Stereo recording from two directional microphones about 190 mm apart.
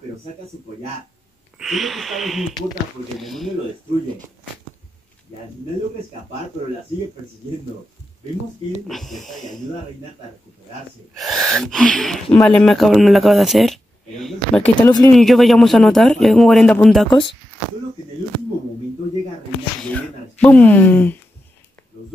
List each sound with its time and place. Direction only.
1.6 s speech: centre (ahead or behind)
8.8 s speech: centre (ahead or behind)
11.1 s speech: centre (ahead or behind)
14.6 s speech: 20° left (ahead or behind)
15.1 s speech: centre (ahead or behind)
19.8 s speech: 5° left (ahead or behind)